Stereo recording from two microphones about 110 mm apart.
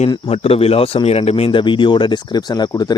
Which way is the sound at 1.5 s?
45° left (ahead or behind).